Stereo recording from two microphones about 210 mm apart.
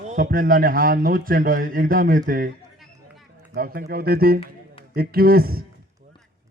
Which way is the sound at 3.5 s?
45° right (ahead or behind).